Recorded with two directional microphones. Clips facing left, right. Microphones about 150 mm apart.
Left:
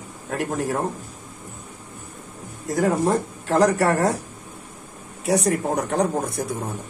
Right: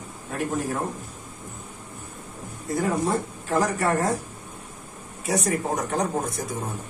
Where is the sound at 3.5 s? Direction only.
75° left (ahead or behind).